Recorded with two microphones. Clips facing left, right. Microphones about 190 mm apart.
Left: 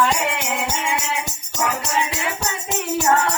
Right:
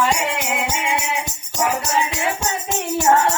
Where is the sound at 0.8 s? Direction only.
20° right (ahead or behind).